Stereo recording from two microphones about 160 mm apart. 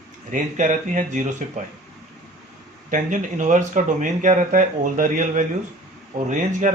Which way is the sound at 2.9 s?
55° right (ahead or behind).